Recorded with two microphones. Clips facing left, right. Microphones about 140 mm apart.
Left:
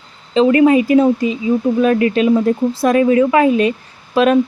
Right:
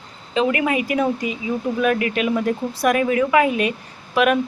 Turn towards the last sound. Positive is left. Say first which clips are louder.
# left 5 dB
turn(degrees=30)  # may be behind; listen again after turning